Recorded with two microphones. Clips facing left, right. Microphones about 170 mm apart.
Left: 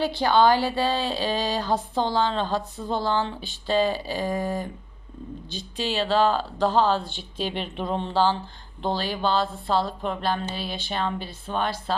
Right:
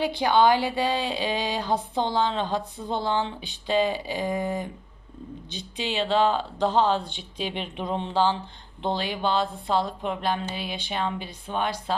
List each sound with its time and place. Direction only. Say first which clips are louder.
0.2 s a woman's voice: left 1 dB; 15° right (ahead or behind)